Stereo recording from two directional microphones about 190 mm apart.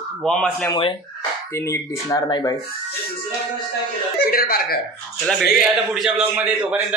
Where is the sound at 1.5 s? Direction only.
15° left (ahead or behind).